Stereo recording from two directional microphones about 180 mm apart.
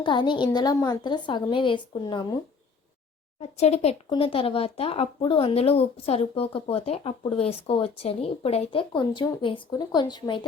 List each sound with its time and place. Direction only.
0.0 s a woman's voice: 25° left (ahead or behind)
3.6 s speech: 35° left (ahead or behind)